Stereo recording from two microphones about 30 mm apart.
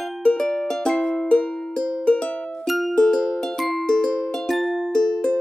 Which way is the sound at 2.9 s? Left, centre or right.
Left.